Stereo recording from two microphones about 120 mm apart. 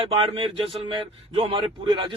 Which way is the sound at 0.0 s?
50° right (ahead or behind).